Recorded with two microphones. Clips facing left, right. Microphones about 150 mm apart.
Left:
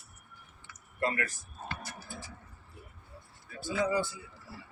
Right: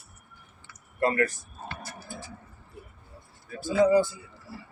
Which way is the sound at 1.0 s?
50° right (ahead or behind).